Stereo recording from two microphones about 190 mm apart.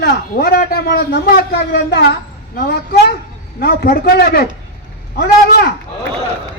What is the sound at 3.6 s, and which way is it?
Speech, 50° left (ahead or behind).